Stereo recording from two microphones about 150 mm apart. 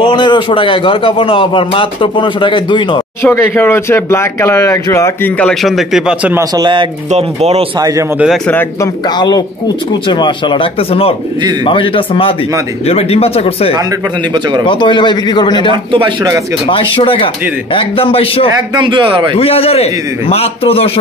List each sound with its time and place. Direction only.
0.0 s a man's voice: 30° left (ahead or behind)
3.3 s speech: 15° left (ahead or behind)
5.4 s speech: centre (ahead or behind)
6.3 s speech: 30° right (ahead or behind)
7.1 s speech: 45° right (ahead or behind)
10.0 s a man's voice: 30° left (ahead or behind)
14.7 s a man's voice: 30° left (ahead or behind)
15.7 s a man's voice: 35° right (ahead or behind)
16.6 s a man's voice: 35° left (ahead or behind)
18.8 s a man's voice: 30° right (ahead or behind)
19.3 s a man's voice: 40° left (ahead or behind)